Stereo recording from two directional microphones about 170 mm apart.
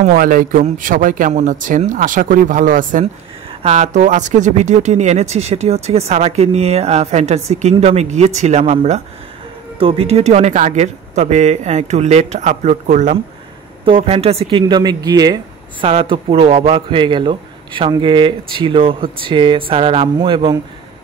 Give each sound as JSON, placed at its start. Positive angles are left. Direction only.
{"t": 0.0, "sound": "speech", "side_deg": -55}
{"t": 13.8, "sound": "speech", "side_deg": -35}